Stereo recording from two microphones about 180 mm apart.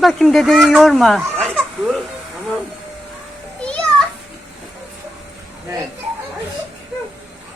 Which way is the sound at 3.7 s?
5° left (ahead or behind).